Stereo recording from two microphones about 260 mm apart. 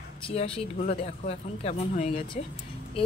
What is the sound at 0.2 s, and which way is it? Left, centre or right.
Speech, left.